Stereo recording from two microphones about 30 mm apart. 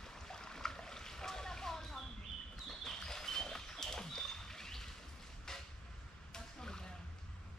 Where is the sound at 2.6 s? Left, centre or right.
Centre.